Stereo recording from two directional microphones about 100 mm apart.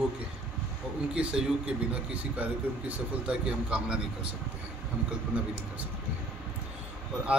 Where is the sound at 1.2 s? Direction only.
10° right (ahead or behind).